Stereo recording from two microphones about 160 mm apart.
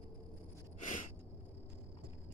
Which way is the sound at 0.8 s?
55° left (ahead or behind).